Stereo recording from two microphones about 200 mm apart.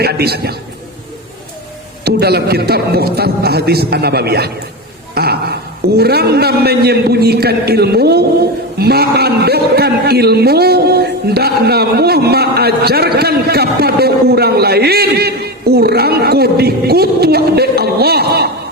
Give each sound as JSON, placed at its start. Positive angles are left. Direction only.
{"t": 0.0, "sound": "a man's voice", "side_deg": -50}
{"t": 2.0, "sound": "a man's voice", "side_deg": -55}
{"t": 5.1, "sound": "a sound", "side_deg": -50}
{"t": 6.0, "sound": "a man's voice", "side_deg": -55}